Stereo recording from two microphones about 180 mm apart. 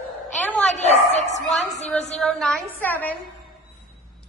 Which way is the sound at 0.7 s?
40° left (ahead or behind).